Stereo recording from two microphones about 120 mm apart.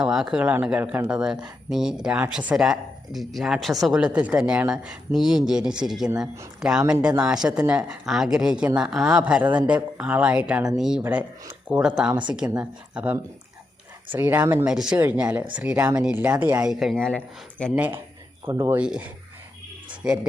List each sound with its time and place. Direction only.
0.0 s speech: 5° right (ahead or behind)
14.7 s speech: 5° right (ahead or behind)
16.6 s speech: centre (ahead or behind)
17.7 s speech: 15° right (ahead or behind)
18.4 s speech: 30° right (ahead or behind)
18.7 s speech: 10° right (ahead or behind)